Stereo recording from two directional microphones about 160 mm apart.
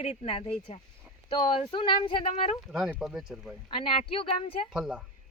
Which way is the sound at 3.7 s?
35° left (ahead or behind).